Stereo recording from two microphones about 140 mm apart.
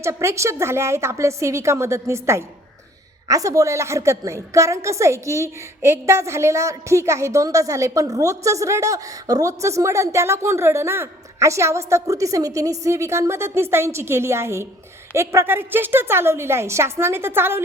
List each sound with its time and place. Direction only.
0.0 s a woman's voice: 20° right (ahead or behind)